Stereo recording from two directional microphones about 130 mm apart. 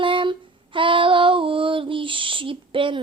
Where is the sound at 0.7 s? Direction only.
40° right (ahead or behind).